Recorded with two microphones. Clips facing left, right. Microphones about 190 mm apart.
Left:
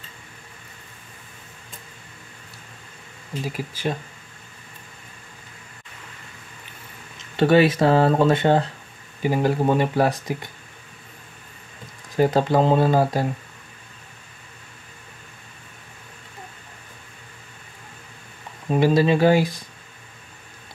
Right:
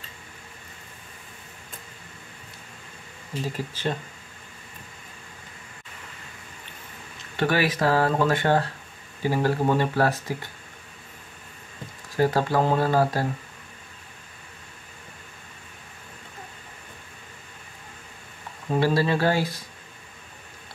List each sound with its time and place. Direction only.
3.4 s speech: 10° left (ahead or behind)
7.3 s speech: 25° left (ahead or behind)
12.2 s speech: 20° left (ahead or behind)
18.7 s speech: 15° left (ahead or behind)